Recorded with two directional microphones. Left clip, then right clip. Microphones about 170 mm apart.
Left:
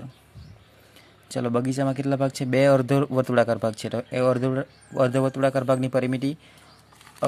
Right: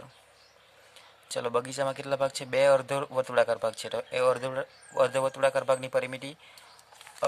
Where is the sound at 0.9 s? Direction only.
5° left (ahead or behind).